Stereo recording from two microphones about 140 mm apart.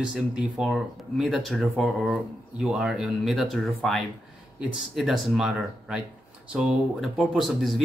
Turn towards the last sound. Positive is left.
turn(degrees=0)  # may be behind; listen again after turning